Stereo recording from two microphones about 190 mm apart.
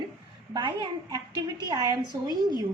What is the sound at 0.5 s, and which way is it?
A woman's voice, 25° right (ahead or behind).